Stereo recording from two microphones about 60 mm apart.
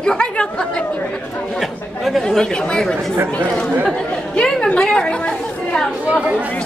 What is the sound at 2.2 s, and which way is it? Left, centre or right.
Speech, centre.